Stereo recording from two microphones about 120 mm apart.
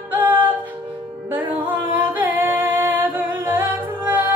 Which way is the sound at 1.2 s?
15° right (ahead or behind).